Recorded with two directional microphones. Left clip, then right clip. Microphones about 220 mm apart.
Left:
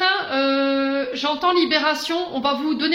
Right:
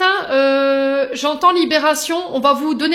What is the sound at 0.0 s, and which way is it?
Speech, 55° right (ahead or behind).